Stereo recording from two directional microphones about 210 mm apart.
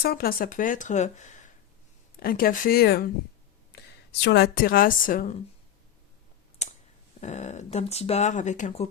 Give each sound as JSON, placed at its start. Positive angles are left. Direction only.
{"t": 0.0, "sound": "a woman's voice", "side_deg": 45}
{"t": 4.2, "sound": "a woman's voice", "side_deg": 50}
{"t": 6.6, "sound": "clicking", "side_deg": 30}
{"t": 7.2, "sound": "speech", "side_deg": 35}